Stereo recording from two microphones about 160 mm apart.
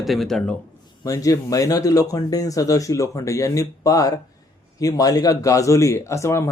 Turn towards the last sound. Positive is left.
turn(degrees=20)  # may be behind; listen again after turning